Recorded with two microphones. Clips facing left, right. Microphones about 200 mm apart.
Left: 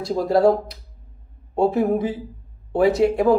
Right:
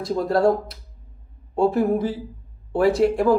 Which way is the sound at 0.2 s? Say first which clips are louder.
Left 3 dB; 25° left (ahead or behind).